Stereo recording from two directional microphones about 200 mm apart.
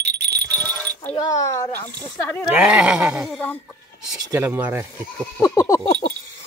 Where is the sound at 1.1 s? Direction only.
20° left (ahead or behind).